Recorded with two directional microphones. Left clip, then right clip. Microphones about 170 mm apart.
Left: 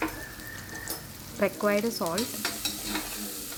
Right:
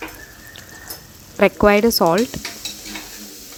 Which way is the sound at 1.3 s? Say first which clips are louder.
Right 12 dB; 55° right (ahead or behind).